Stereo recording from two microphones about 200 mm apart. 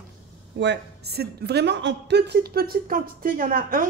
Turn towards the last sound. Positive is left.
turn(degrees=-45)  # may be behind; listen again after turning